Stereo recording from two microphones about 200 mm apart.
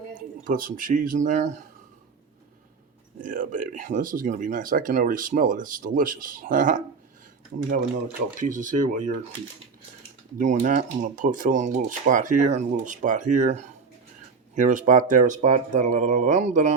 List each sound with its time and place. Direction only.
0.1 s speech: 45° right (ahead or behind)
3.2 s speech: 40° right (ahead or behind)
8.4 s speech: 40° right (ahead or behind)
10.3 s speech: 40° right (ahead or behind)